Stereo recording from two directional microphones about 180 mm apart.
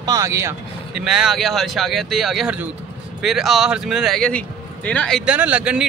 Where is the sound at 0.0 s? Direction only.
20° right (ahead or behind).